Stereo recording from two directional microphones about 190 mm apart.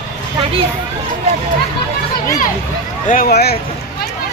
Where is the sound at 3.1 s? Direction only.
50° left (ahead or behind).